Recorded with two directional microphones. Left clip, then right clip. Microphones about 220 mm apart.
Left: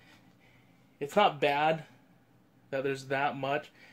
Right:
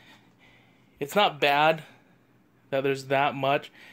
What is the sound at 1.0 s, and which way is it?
Speech, 40° right (ahead or behind).